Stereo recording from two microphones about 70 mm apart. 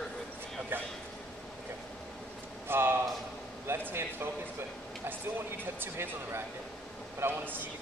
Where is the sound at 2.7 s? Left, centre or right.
Right.